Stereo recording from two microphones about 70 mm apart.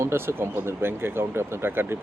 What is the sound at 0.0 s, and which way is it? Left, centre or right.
Speech, right.